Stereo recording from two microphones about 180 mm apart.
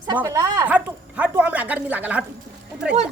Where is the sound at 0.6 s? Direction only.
10° right (ahead or behind).